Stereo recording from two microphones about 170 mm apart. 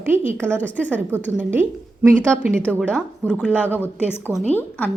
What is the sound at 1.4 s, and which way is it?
A woman's voice, 10° right (ahead or behind).